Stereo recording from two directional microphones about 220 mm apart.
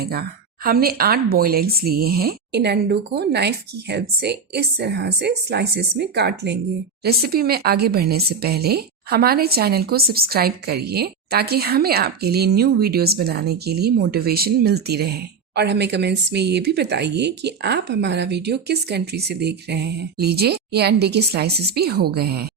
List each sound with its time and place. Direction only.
0.0 s speech: 45° right (ahead or behind)